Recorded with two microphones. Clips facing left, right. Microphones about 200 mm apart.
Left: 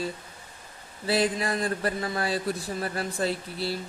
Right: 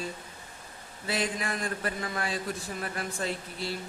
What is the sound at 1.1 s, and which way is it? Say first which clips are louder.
Speech: left 6 dB; 35° left (ahead or behind).